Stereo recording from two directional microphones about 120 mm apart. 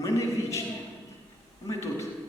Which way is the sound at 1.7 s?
25° left (ahead or behind).